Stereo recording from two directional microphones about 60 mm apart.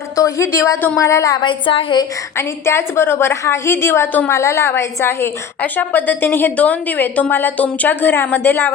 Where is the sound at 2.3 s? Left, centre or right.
Left.